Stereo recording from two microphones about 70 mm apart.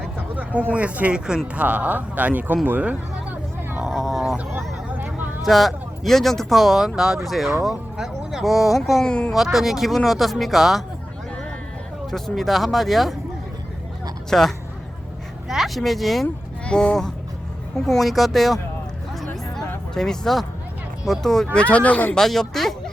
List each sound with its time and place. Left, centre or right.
0.3 s speech: right
2.6 s music: right
3.8 s a sound: centre
4.9 s a sound: right
5.5 s speech: centre
9.0 s speech: centre
9.3 s speech: centre
12.1 s speech: centre
14.3 s speech: centre
15.4 s a sound: centre
16.6 s speech: centre
19.9 s speech: centre
21.6 s speech: centre
22.1 s speech: centre